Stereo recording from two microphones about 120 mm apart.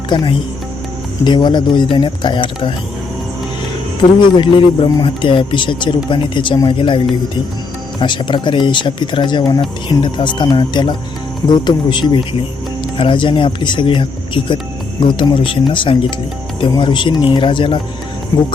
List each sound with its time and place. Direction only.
0.1 s speech: 45° left (ahead or behind)
4.4 s speech: 45° left (ahead or behind)
8.0 s speech: 40° left (ahead or behind)